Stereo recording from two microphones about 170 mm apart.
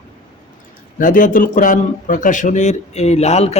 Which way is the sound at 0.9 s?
50° left (ahead or behind).